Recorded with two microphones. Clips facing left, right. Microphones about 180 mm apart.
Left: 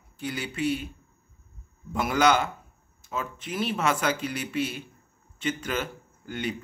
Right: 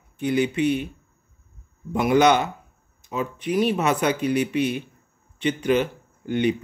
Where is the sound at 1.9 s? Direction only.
20° right (ahead or behind).